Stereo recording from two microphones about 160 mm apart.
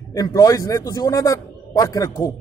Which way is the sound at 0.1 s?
20° left (ahead or behind).